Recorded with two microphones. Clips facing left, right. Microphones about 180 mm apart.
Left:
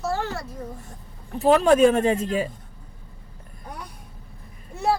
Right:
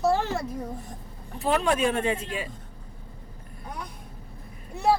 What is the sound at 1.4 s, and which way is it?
Speech, 40° left (ahead or behind).